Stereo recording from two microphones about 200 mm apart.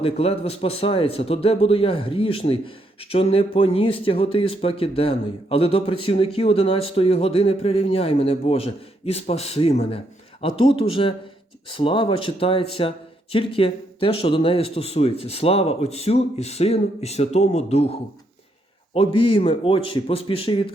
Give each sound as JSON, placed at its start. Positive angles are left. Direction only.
{"t": 0.0, "sound": "a man's voice", "side_deg": 30}